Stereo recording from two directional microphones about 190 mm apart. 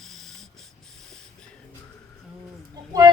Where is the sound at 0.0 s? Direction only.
Centre (ahead or behind).